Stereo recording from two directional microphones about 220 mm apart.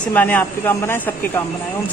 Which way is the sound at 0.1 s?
5° left (ahead or behind).